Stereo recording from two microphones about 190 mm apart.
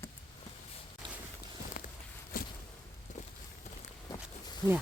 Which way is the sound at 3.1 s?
40° left (ahead or behind).